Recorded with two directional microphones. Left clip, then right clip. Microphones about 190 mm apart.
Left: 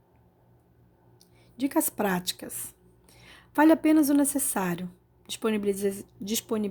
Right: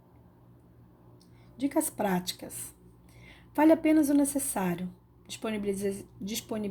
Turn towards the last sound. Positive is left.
turn(degrees=40)  # may be behind; listen again after turning